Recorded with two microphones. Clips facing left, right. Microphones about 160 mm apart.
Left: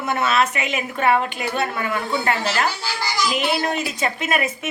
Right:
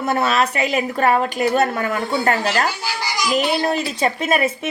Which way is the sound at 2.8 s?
15° right (ahead or behind).